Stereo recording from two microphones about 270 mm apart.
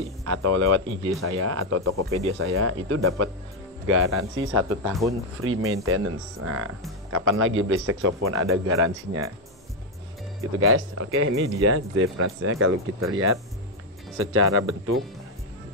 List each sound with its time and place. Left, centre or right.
0.2 s speech: right
1.9 s speech: right
2.3 s speech: right
10.5 s speech: right